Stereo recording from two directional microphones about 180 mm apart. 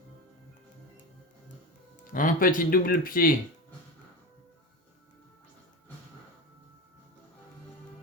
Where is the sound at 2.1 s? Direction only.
50° left (ahead or behind).